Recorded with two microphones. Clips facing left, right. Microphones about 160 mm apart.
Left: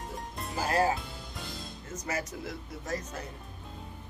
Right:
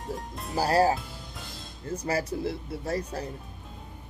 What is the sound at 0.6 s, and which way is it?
Speech, 35° right (ahead or behind).